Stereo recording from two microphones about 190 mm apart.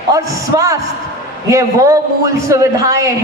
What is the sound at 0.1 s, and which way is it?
A woman's voice, 20° right (ahead or behind).